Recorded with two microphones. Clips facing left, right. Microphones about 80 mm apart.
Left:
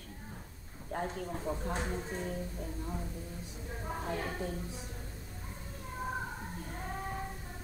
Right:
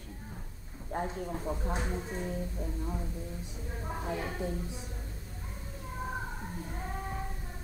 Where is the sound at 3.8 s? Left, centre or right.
Centre.